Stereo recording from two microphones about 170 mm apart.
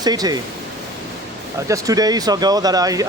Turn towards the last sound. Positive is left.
turn(degrees=-20)  # may be behind; listen again after turning